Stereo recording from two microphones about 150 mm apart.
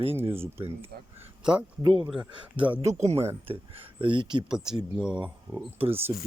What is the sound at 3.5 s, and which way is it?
Speech, 40° right (ahead or behind).